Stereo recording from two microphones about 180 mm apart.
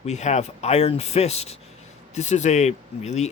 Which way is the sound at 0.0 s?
40° left (ahead or behind).